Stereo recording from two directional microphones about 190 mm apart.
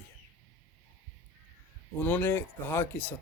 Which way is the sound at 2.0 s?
10° left (ahead or behind).